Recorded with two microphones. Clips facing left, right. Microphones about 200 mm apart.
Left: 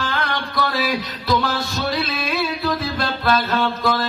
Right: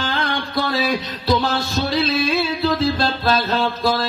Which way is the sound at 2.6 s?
30° right (ahead or behind).